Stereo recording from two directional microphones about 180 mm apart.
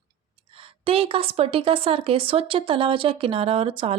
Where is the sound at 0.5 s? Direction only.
30° right (ahead or behind).